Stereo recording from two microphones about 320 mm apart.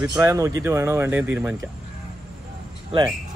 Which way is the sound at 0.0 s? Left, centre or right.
Centre.